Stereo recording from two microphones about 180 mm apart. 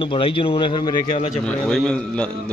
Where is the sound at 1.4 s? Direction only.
5° left (ahead or behind).